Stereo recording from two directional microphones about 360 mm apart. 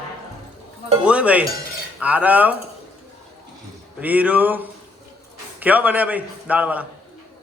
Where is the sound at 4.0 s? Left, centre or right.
Centre.